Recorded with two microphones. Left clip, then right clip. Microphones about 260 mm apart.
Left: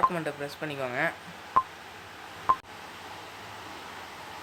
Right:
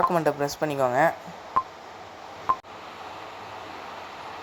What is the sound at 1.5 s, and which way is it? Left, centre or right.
Telephone dialing, centre.